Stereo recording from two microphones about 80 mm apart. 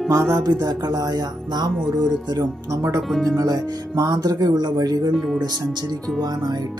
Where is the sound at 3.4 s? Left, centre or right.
Right.